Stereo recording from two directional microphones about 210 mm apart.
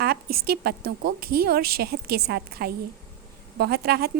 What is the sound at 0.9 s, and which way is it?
A woman's voice, 45° right (ahead or behind).